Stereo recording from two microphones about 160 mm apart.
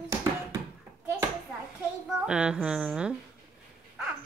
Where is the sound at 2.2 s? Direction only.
5° right (ahead or behind).